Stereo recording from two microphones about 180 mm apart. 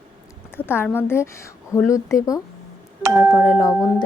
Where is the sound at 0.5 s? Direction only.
10° left (ahead or behind).